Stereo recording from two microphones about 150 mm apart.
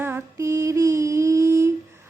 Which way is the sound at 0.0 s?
20° right (ahead or behind).